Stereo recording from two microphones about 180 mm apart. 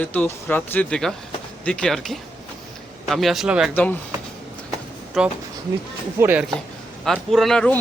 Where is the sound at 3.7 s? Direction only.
10° left (ahead or behind).